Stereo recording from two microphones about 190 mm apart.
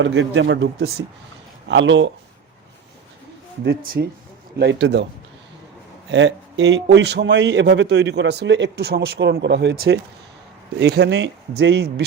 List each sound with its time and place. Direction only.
0.0 s speech: 75° right (ahead or behind)
1.6 s speech: 75° right (ahead or behind)
3.6 s a man's voice: 55° right (ahead or behind)
6.1 s a man's voice: 70° right (ahead or behind)